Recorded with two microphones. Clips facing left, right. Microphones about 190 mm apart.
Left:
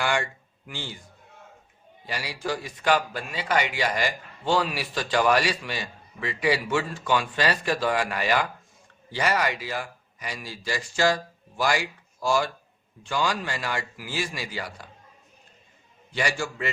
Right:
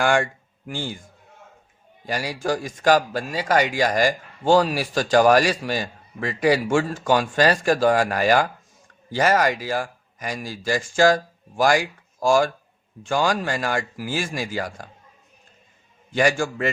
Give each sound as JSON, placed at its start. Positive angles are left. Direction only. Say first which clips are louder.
{"t": 0.0, "sound": "speech", "louder": "right 6 dB", "side_deg": -50}
{"t": 16.1, "sound": "speech", "louder": "right 8 dB", "side_deg": -50}